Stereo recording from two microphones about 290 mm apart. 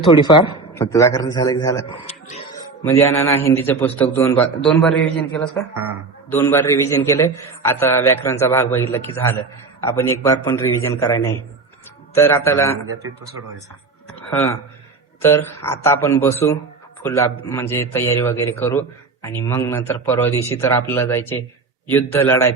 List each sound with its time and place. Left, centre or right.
0.1 s a man's voice: centre
2.0 s speech: left
2.8 s a man's voice: centre
6.3 s a man's voice: centre
14.3 s a man's voice: centre